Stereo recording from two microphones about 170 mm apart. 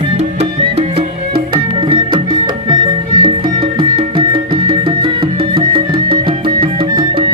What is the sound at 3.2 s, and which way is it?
Music, 30° right (ahead or behind).